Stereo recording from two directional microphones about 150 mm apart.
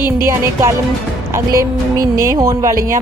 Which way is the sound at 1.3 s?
20° right (ahead or behind).